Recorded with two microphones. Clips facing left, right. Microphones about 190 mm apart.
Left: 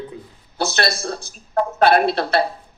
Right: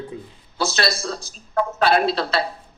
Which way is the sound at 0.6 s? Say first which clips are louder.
Left 1 dB; 60° left (ahead or behind).